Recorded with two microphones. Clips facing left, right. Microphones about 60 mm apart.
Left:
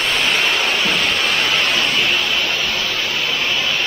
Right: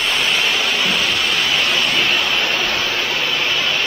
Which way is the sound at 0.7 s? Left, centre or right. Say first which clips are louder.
Even; centre.